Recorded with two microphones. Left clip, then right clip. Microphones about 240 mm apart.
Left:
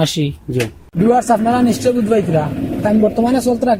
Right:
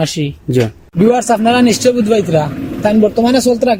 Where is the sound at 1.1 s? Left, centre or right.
Right.